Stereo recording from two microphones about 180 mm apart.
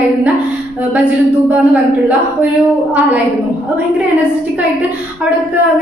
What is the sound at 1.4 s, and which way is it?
Speech, 10° right (ahead or behind).